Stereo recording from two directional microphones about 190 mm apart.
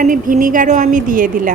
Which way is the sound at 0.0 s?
45° right (ahead or behind).